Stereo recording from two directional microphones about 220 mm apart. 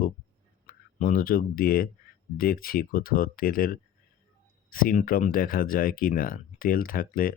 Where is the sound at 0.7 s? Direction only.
40° left (ahead or behind).